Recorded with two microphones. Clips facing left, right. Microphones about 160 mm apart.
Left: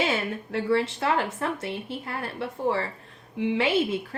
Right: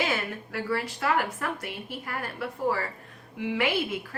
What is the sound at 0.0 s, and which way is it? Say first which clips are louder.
A woman's voice: left 3 dB; 25° left (ahead or behind).